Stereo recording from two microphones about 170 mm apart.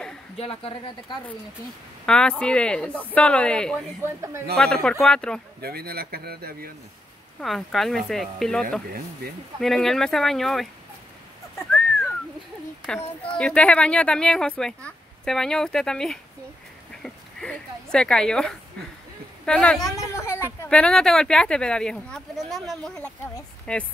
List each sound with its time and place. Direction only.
0.4 s a woman's voice: 30° left (ahead or behind)
2.0 s speech: 5° left (ahead or behind)
2.9 s speech: 10° right (ahead or behind)
3.2 s speech: 5° left (ahead or behind)
4.0 s speech: 15° right (ahead or behind)
5.0 s speech: 5° left (ahead or behind)
5.6 s speech: 65° right (ahead or behind)
7.3 s speech: centre (ahead or behind)
12.8 s speech: 5° left (ahead or behind)
17.0 s a sound: 5° left (ahead or behind)
17.9 s speech: 5° left (ahead or behind)
19.8 s speech: 15° left (ahead or behind)